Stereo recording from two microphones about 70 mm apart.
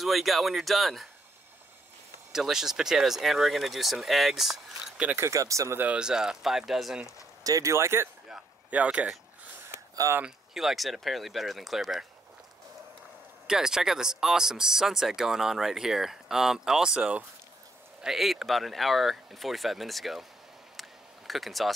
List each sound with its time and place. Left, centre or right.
0.0 s speech: centre
2.3 s speech: centre
5.3 s speech: right
5.9 s speech: centre
7.4 s speech: right
7.7 s speech: right
8.6 s speech: centre
10.2 s speech: centre
13.5 s speech: centre
18.0 s speech: centre
21.3 s speech: centre